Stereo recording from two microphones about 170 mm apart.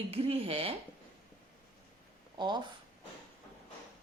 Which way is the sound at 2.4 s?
25° right (ahead or behind).